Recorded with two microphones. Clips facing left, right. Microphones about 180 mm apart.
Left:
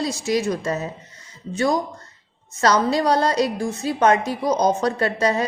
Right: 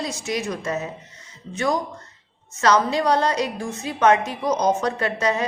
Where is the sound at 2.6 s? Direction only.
35° left (ahead or behind).